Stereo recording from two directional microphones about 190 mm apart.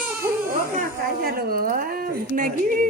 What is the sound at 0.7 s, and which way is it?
Speech, 45° right (ahead or behind).